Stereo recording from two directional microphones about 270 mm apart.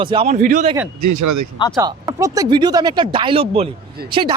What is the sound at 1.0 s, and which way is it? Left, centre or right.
Speech, right.